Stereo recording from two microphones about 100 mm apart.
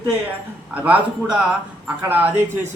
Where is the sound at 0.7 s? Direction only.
15° right (ahead or behind).